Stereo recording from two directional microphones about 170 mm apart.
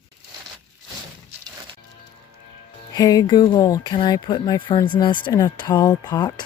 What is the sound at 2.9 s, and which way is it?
Speech, 20° left (ahead or behind).